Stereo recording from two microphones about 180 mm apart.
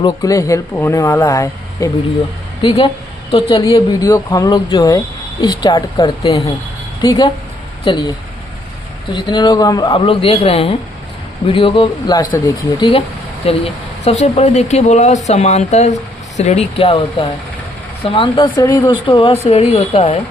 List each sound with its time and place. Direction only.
0.0 s speech: 20° left (ahead or behind)
2.6 s speech: 30° left (ahead or behind)
9.1 s speech: 25° left (ahead or behind)
19.0 s speech: 30° left (ahead or behind)